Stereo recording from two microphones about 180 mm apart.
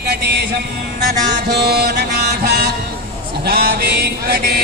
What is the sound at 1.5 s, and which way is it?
Mantra, 65° right (ahead or behind).